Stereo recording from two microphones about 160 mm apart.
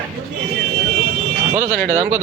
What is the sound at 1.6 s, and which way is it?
Speech, 15° right (ahead or behind).